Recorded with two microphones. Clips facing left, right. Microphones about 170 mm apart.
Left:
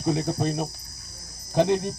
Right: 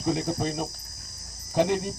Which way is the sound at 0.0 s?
20° left (ahead or behind).